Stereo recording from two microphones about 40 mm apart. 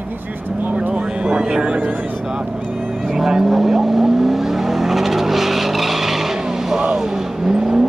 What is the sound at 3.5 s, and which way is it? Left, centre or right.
Vehicle, centre.